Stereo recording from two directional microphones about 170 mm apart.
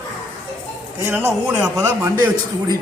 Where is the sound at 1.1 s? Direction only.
15° right (ahead or behind).